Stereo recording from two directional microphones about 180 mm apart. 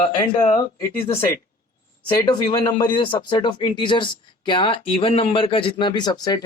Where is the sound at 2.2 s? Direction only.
20° left (ahead or behind).